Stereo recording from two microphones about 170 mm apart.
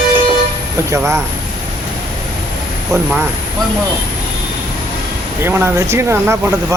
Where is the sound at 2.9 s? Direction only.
20° right (ahead or behind).